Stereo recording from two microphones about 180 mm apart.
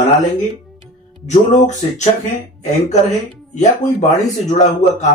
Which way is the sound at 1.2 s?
40° left (ahead or behind).